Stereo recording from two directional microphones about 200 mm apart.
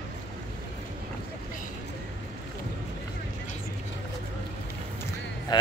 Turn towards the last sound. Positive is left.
turn(degrees=20)  # may be behind; listen again after turning